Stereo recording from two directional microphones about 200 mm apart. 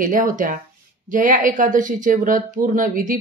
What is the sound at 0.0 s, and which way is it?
Speech, 40° right (ahead or behind).